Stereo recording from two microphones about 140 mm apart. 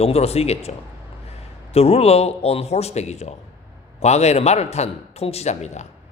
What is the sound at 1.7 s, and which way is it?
Speech, 45° left (ahead or behind).